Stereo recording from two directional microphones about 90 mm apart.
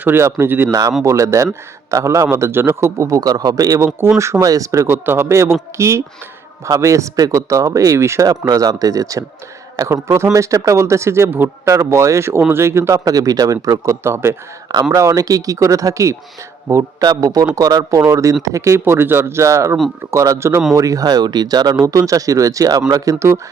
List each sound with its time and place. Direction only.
0.0 s speech: 25° right (ahead or behind)
0.7 s speech: 40° right (ahead or behind)
3.2 s speech: 45° right (ahead or behind)
8.3 s speech: 45° right (ahead or behind)
13.1 s speech: 40° right (ahead or behind)
17.0 s speech: 45° right (ahead or behind)